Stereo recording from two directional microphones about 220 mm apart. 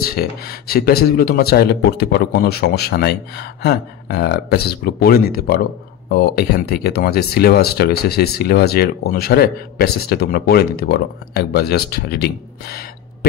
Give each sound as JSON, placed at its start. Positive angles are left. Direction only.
{"t": 0.0, "sound": "speech", "side_deg": 45}